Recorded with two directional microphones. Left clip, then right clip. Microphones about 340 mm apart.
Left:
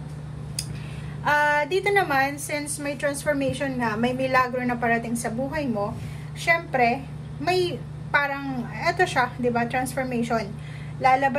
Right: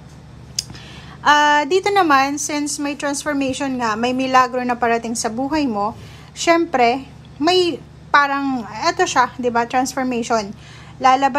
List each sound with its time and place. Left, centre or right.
1.3 s a woman's voice: centre